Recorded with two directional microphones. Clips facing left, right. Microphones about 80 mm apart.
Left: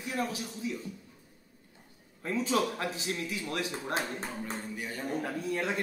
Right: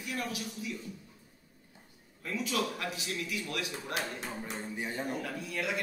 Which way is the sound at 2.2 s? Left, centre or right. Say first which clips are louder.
Left 4 dB; left.